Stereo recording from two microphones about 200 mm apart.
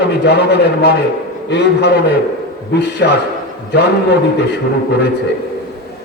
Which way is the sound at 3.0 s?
55° left (ahead or behind).